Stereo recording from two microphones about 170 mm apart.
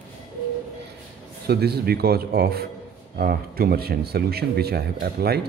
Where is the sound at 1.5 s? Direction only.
70° right (ahead or behind).